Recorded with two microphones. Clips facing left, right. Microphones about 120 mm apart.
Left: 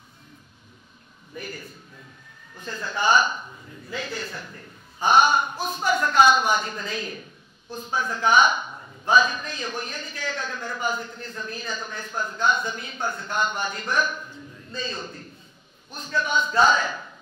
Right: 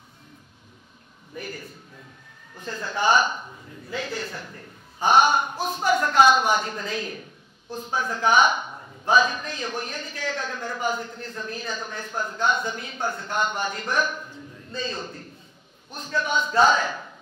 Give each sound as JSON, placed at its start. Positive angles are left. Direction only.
{"t": 1.3, "sound": "a man's voice", "side_deg": -45}
{"t": 3.3, "sound": "a man's voice", "side_deg": -35}
{"t": 4.0, "sound": "a man's voice", "side_deg": -50}
{"t": 5.0, "sound": "a man's voice", "side_deg": -55}
{"t": 8.3, "sound": "a man's voice", "side_deg": -55}
{"t": 8.6, "sound": "a sound", "side_deg": -30}
{"t": 9.0, "sound": "a man's voice", "side_deg": -50}
{"t": 13.0, "sound": "a man's voice", "side_deg": -35}
{"t": 13.3, "sound": "a man's voice", "side_deg": -55}
{"t": 14.1, "sound": "a sound", "side_deg": -35}
{"t": 14.7, "sound": "a man's voice", "side_deg": -55}